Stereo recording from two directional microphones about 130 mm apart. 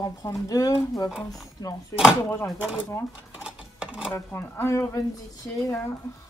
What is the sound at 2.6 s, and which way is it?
Speech, 10° right (ahead or behind).